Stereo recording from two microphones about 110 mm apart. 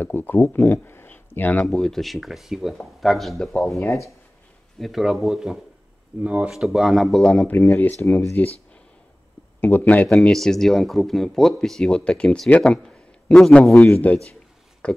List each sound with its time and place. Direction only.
0.0 s speech: 20° left (ahead or behind)
1.7 s speech: centre (ahead or behind); by 8.5 s 20° left (ahead or behind)
9.6 s a man's voice: 15° left (ahead or behind)
10.0 s speech: 5° left (ahead or behind)
13.7 s a man's voice: 15° left (ahead or behind)